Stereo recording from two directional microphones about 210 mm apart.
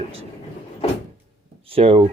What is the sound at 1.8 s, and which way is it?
Speech, 30° right (ahead or behind).